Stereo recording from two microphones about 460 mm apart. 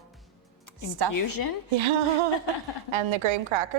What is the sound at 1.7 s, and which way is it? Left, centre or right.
A woman's voice, right.